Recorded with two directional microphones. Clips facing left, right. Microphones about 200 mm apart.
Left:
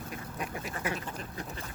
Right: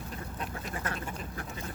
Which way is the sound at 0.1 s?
10° left (ahead or behind).